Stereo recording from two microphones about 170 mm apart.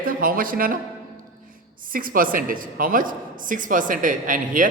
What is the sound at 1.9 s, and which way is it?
A woman's voice, 55° right (ahead or behind).